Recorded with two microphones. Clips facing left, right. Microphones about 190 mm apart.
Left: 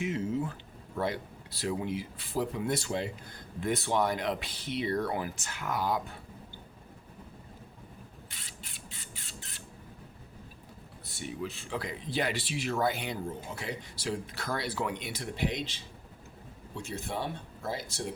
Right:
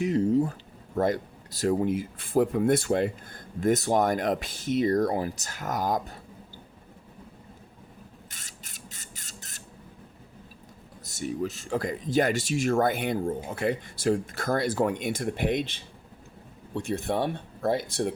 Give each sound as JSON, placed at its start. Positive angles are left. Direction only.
{"t": 0.0, "sound": "speech", "side_deg": -40}
{"t": 8.3, "sound": "a sound", "side_deg": -45}
{"t": 11.0, "sound": "speech", "side_deg": -45}